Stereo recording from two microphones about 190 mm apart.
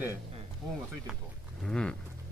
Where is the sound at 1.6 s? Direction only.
5° left (ahead or behind).